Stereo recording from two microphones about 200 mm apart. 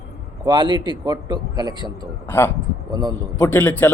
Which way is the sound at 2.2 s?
10° left (ahead or behind).